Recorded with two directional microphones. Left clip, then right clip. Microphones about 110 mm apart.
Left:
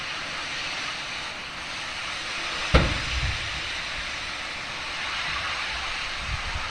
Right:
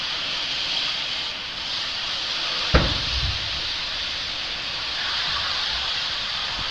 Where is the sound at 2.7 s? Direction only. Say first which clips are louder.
Right 1 dB; 30° left (ahead or behind).